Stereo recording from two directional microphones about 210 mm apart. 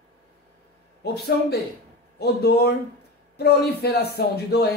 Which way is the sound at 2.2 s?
50° left (ahead or behind).